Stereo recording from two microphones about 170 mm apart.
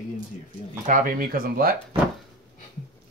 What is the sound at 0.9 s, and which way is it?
Speech, 55° right (ahead or behind).